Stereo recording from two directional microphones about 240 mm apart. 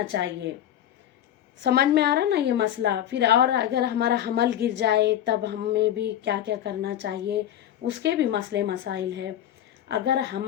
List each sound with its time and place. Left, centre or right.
0.1 s a woman's voice: right
1.6 s a woman's voice: right